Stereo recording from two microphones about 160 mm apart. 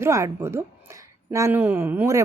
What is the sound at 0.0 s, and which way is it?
A woman's voice, 15° right (ahead or behind).